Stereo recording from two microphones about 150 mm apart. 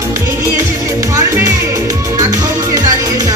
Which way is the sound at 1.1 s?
20° right (ahead or behind).